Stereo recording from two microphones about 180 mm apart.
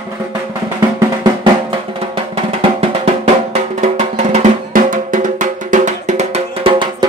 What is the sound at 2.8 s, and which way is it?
Drum, 35° right (ahead or behind).